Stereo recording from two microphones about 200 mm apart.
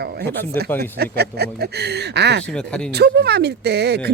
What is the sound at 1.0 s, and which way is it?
Speech, 55° right (ahead or behind).